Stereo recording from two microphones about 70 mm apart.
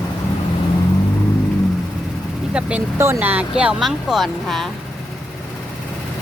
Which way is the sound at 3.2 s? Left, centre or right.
Right.